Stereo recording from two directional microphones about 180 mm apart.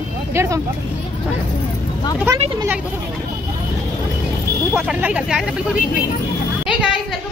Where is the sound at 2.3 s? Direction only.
15° right (ahead or behind).